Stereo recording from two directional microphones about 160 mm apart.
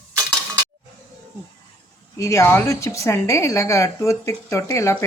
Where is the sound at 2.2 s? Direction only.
15° left (ahead or behind).